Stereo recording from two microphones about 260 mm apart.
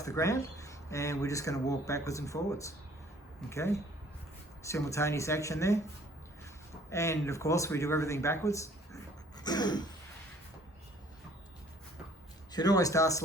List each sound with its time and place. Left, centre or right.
0.0 s speech: centre
6.9 s speech: centre
9.4 s throat clearing: centre
12.5 s speech: centre